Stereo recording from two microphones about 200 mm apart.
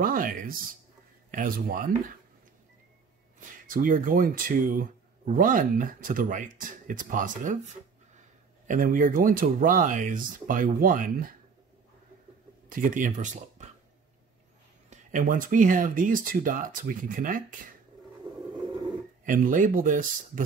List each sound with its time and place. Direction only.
0.0 s speech: 45° right (ahead or behind)
3.3 s speech: 45° right (ahead or behind)
12.6 s speech: 45° right (ahead or behind)
14.9 s speech: 40° right (ahead or behind)
18.3 s vehicle: 25° right (ahead or behind)
19.2 s speech: 40° right (ahead or behind)